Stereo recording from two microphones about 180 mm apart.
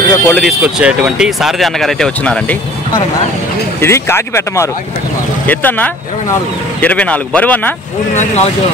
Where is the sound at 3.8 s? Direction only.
15° left (ahead or behind).